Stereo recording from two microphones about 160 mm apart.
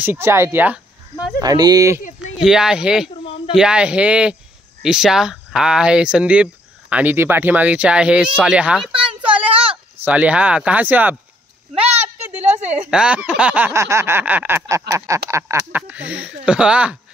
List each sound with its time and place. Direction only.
0.0 s speech: 15° right (ahead or behind)
1.4 s speech: 25° right (ahead or behind)
2.3 s speech: 5° right (ahead or behind)
9.2 s a sound: 10° right (ahead or behind)
9.5 s a sound: 35° right (ahead or behind)
10.0 s speech: 10° right (ahead or behind)
11.7 s a sound: 40° right (ahead or behind)
12.9 s speech: 5° right (ahead or behind)
13.7 s speech: 20° right (ahead or behind)